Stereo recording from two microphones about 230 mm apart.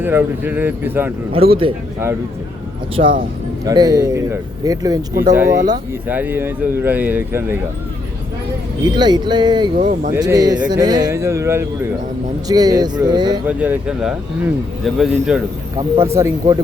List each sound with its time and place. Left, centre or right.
0.0 s speech: centre
1.3 s speech: right
3.6 s speech: centre
8.9 s speech: centre
13.5 s speech: centre